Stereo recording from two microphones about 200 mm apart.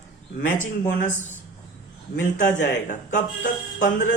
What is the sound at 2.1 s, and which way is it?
Speech, 40° left (ahead or behind).